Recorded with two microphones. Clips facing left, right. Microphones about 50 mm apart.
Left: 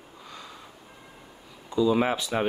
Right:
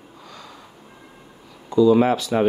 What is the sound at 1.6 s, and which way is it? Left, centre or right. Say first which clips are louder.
Speech: right 8 dB; centre.